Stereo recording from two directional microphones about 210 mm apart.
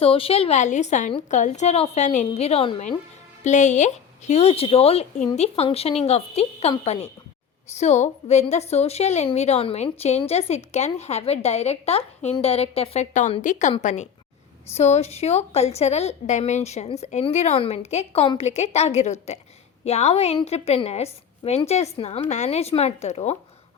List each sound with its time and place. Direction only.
0.0 s a woman's voice: 25° left (ahead or behind)